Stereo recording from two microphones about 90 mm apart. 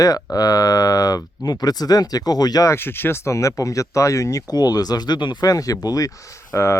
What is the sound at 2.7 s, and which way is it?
Speech, 25° left (ahead or behind).